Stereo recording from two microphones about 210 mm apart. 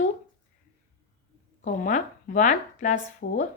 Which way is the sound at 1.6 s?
40° left (ahead or behind).